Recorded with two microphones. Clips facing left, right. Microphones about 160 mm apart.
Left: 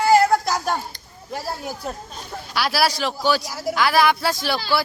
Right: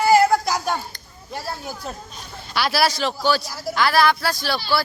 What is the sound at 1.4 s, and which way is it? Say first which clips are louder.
A man's voice: left 1 dB; 10° left (ahead or behind).